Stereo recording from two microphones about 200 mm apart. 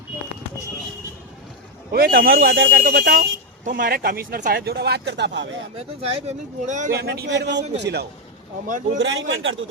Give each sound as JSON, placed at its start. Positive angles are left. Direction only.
{"t": 1.9, "sound": "speech", "side_deg": -45}
{"t": 2.8, "sound": "speech", "side_deg": -45}
{"t": 5.7, "sound": "speech", "side_deg": -30}
{"t": 6.9, "sound": "a man's voice", "side_deg": -55}
{"t": 9.0, "sound": "a man's voice", "side_deg": -70}